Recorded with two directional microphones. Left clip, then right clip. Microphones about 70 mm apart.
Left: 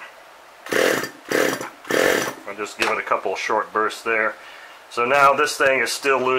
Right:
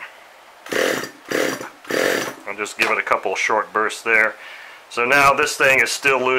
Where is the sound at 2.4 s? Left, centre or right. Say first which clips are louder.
Right 3 dB; right.